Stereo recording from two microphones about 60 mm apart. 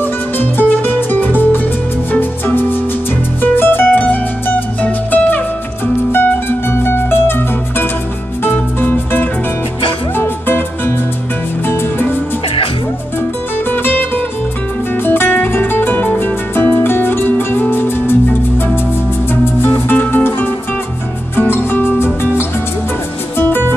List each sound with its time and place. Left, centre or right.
0.0 s music: left
4.8 s music: left
6.1 s music: left
13.7 s music: left
19.4 s music: left